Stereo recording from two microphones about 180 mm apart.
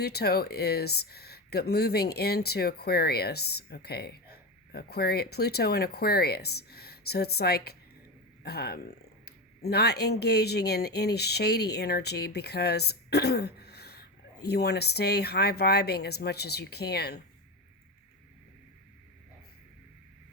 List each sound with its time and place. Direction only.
0.0 s speech: 60° left (ahead or behind)